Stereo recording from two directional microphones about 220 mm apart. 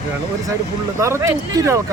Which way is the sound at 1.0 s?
15° right (ahead or behind).